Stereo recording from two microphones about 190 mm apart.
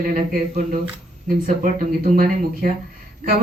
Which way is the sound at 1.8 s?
50° right (ahead or behind).